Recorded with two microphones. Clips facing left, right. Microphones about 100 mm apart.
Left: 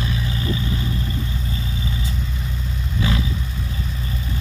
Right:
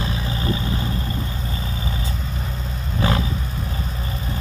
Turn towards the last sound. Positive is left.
turn(degrees=-40)  # may be behind; listen again after turning